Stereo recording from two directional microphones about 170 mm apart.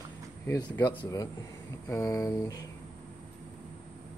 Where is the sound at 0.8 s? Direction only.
20° left (ahead or behind).